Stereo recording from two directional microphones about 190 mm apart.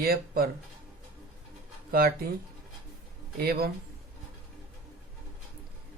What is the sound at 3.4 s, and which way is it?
Speech, 55° right (ahead or behind).